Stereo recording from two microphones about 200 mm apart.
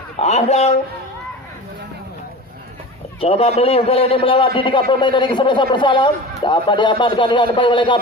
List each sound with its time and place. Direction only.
0.2 s a man's voice: 35° left (ahead or behind)
3.2 s a man's voice: 30° left (ahead or behind)